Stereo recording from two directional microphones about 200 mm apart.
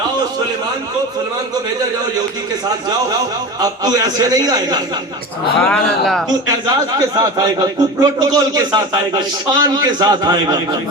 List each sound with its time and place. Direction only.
3.6 s a man's voice: 20° right (ahead or behind)
5.6 s speech: 5° left (ahead or behind)
6.5 s a man's voice: 20° right (ahead or behind)